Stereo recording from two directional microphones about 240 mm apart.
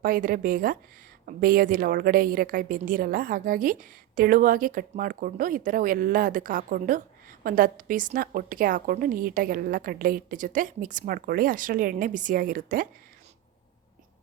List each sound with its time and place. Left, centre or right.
0.0 s a woman's voice: right